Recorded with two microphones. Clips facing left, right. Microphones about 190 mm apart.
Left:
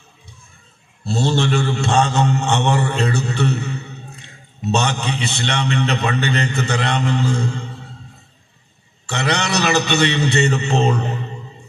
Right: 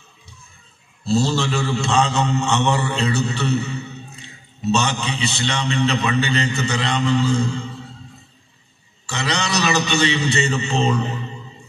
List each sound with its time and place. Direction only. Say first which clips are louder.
1.0 s a sound: even; 55° left (ahead or behind)
2.6 s a man's voice: left 2 dB; 55° left (ahead or behind)
9.0 s a man's voice: left 3 dB; 60° left (ahead or behind)